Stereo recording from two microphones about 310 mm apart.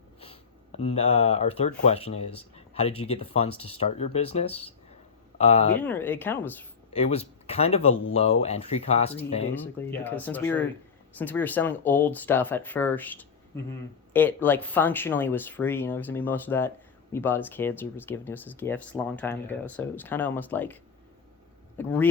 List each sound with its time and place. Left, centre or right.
0.8 s speech: left
5.8 s speech: centre
6.9 s speech: centre
9.9 s speech: centre
21.8 s speech: centre